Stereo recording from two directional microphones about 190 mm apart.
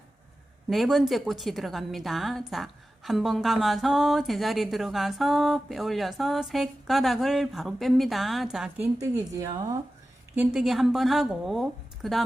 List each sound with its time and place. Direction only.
0.7 s speech: centre (ahead or behind)
9.4 s speech: 20° right (ahead or behind)
10.3 s speech: 5° right (ahead or behind)